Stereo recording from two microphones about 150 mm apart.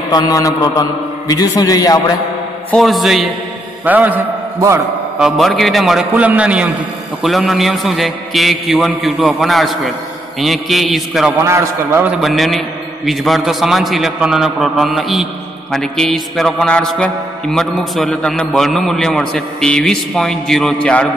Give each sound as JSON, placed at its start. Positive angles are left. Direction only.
{"t": 0.1, "sound": "a man's voice", "side_deg": 20}
{"t": 2.7, "sound": "music", "side_deg": 0}
{"t": 3.8, "sound": "a man's voice", "side_deg": -10}
{"t": 5.2, "sound": "music", "side_deg": 0}
{"t": 11.4, "sound": "a man's voice", "side_deg": -20}
{"t": 12.2, "sound": "music", "side_deg": 0}